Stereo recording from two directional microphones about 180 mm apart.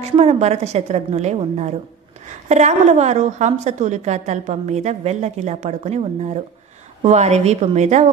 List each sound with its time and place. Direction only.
0.0 s a woman's voice: 35° right (ahead or behind)